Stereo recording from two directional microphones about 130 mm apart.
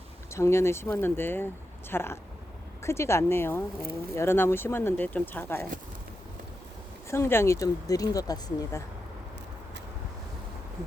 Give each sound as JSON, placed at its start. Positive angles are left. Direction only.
{"t": 0.3, "sound": "speech", "side_deg": 20}
{"t": 7.1, "sound": "speech", "side_deg": 20}